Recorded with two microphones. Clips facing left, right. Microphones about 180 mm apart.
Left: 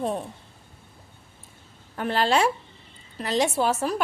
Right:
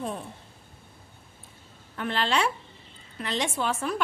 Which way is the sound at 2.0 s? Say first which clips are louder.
Left 4 dB; 40° left (ahead or behind).